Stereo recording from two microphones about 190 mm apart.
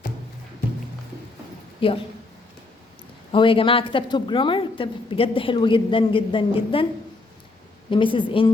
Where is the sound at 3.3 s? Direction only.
25° left (ahead or behind).